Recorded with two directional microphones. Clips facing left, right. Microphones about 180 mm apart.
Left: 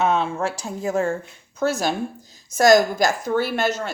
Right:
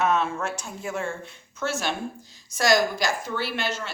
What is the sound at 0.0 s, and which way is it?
A woman's voice, 30° left (ahead or behind).